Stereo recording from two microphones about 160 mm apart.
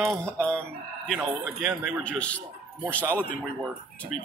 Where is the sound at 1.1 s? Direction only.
Centre (ahead or behind).